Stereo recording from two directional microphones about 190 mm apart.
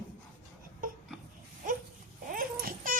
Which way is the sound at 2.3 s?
45° right (ahead or behind).